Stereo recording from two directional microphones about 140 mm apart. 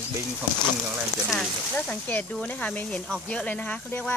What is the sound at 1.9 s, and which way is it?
Speech, 10° left (ahead or behind).